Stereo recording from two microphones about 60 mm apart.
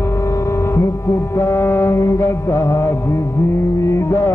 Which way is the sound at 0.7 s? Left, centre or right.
Left.